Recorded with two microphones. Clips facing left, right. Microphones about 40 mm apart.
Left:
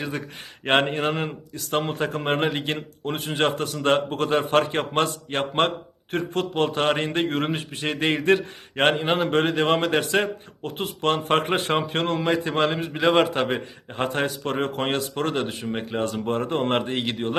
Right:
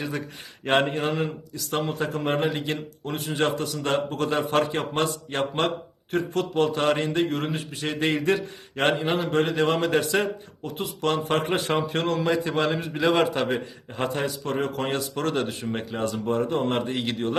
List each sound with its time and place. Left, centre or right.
0.6 s a man's voice: left
14.1 s a man's voice: left